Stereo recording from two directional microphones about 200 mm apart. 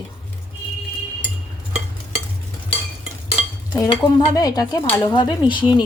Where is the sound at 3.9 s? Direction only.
20° left (ahead or behind).